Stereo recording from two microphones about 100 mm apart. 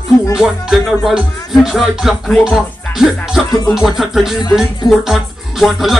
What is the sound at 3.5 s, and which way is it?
Music, 40° left (ahead or behind).